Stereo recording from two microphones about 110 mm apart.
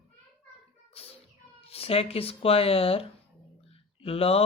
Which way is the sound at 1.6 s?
65° left (ahead or behind).